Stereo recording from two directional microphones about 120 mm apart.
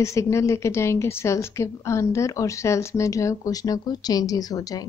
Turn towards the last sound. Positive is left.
turn(degrees=30)  # may be behind; listen again after turning